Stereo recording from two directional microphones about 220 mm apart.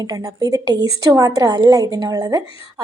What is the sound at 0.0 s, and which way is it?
A woman's voice, 20° right (ahead or behind).